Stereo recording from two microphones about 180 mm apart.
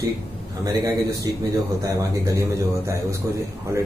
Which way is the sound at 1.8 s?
20° right (ahead or behind).